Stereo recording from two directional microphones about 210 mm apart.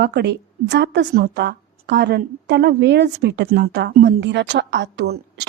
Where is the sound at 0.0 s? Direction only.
50° right (ahead or behind).